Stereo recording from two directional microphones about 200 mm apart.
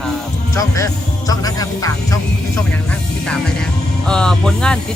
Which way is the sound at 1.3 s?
20° left (ahead or behind).